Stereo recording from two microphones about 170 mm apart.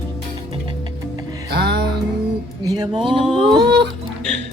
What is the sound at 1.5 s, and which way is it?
Music, 70° right (ahead or behind).